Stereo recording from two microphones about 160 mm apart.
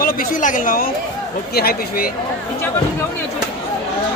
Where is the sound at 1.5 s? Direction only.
70° left (ahead or behind).